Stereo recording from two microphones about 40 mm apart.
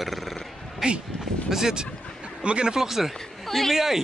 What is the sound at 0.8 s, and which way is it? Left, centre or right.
Speech, centre.